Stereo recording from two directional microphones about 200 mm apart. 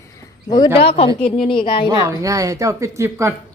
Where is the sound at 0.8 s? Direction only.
30° left (ahead or behind).